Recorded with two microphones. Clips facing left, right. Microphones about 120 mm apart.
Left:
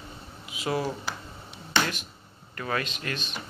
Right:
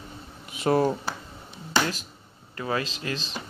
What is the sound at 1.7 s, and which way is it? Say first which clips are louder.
Finger snapping: right 2 dB; 35° right (ahead or behind).